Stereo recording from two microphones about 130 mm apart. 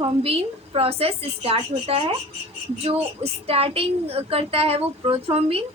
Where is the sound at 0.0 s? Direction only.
50° right (ahead or behind).